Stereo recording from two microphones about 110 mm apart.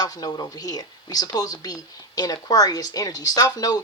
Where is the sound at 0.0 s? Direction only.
35° left (ahead or behind).